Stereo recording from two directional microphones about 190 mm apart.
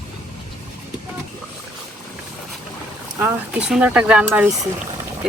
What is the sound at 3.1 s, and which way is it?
Speech, 15° right (ahead or behind).